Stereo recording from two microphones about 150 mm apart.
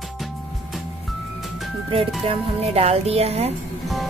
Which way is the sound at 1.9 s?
40° right (ahead or behind).